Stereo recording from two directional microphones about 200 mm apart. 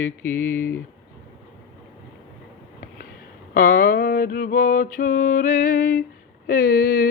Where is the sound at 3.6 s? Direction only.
45° left (ahead or behind).